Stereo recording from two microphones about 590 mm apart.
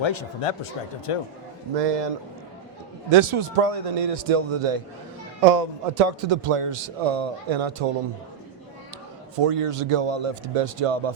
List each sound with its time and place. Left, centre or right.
0.0 s speech: left
1.7 s a man's voice: right
3.1 s a man's voice: right
5.5 s a man's voice: right
9.3 s a man's voice: right